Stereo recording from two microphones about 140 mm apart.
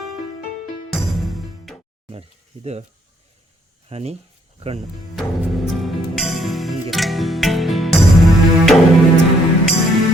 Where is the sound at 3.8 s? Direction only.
45° right (ahead or behind).